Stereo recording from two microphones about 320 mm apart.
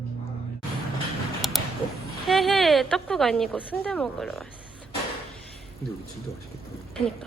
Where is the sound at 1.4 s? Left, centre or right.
Centre.